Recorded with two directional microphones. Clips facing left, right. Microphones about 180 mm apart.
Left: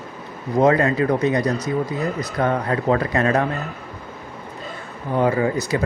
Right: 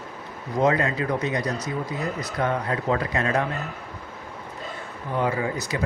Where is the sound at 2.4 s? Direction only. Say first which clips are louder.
Left 5 dB; 50° left (ahead or behind).